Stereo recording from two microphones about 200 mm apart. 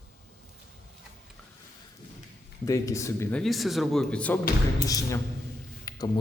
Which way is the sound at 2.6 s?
15° left (ahead or behind).